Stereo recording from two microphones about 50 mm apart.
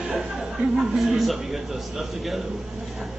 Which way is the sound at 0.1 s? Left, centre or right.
Centre.